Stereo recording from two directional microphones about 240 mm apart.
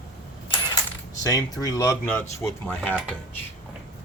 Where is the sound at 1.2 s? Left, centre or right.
Centre.